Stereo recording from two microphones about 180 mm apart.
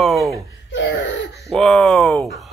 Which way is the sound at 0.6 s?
90° left.